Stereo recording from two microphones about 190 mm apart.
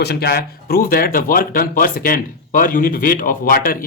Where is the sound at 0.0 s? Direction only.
60° left (ahead or behind).